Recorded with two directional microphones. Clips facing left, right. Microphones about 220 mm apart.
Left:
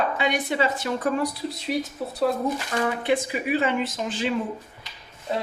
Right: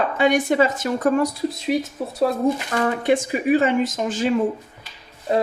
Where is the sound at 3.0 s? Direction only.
45° right (ahead or behind).